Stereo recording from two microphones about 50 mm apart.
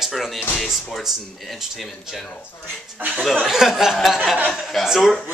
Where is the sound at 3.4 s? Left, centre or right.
Centre.